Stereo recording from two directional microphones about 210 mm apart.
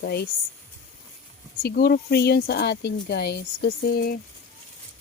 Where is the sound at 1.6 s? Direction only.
50° left (ahead or behind).